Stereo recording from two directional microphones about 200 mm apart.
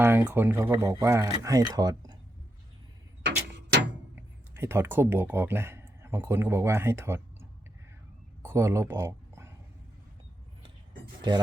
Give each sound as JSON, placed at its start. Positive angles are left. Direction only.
{"t": 0.0, "sound": "speech", "side_deg": -10}
{"t": 4.1, "sound": "speech", "side_deg": -10}
{"t": 8.4, "sound": "a sound", "side_deg": -15}